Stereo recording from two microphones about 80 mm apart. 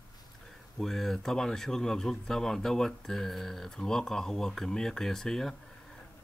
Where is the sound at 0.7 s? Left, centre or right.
Centre.